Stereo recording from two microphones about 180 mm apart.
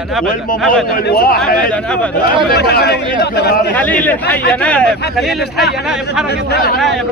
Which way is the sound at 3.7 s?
10° left (ahead or behind).